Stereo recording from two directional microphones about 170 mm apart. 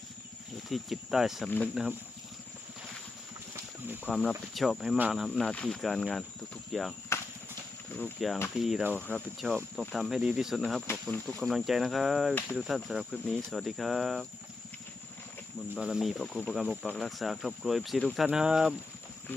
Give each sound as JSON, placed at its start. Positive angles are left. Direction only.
{"t": 0.7, "sound": "speech", "side_deg": 0}
{"t": 1.5, "sound": "speech", "side_deg": 10}
{"t": 1.7, "sound": "speech", "side_deg": -5}
{"t": 3.5, "sound": "a sound", "side_deg": -10}
{"t": 4.1, "sound": "speech", "side_deg": 0}
{"t": 7.1, "sound": "horse", "side_deg": 15}
{"t": 7.9, "sound": "speech", "side_deg": 5}
{"t": 15.7, "sound": "speech", "side_deg": -5}